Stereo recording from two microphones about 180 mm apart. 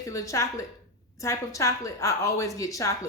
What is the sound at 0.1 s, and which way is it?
A woman's voice, 15° left (ahead or behind).